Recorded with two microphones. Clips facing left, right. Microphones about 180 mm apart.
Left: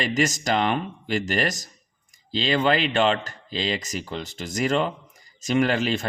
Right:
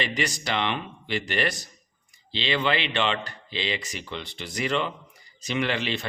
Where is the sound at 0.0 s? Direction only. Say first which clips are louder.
Left 5 dB; 45° left (ahead or behind).